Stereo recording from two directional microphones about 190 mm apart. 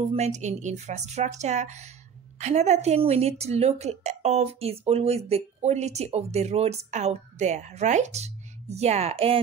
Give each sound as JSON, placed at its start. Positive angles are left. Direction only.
{"t": 0.0, "sound": "speech", "side_deg": -35}